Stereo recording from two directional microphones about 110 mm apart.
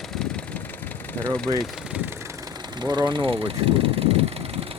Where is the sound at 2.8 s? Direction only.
40° right (ahead or behind); by 4.6 s 60° right (ahead or behind).